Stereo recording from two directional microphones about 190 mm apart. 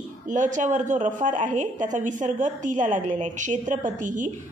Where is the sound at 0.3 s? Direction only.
40° right (ahead or behind).